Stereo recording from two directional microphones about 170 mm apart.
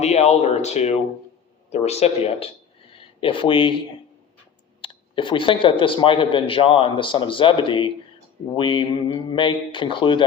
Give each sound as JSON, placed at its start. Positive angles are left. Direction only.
{"t": 0.0, "sound": "speech", "side_deg": 40}
{"t": 4.8, "sound": "speech", "side_deg": 30}